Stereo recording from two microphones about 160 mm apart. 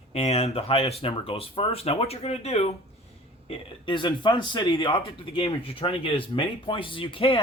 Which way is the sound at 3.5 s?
30° left (ahead or behind).